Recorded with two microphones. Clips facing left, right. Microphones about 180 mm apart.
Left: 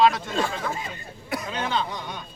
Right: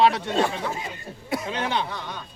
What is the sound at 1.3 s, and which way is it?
Speech, 25° right (ahead or behind).